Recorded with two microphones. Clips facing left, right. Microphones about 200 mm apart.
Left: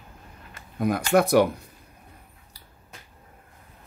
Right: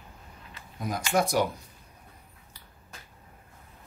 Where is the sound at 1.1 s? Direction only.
60° left (ahead or behind).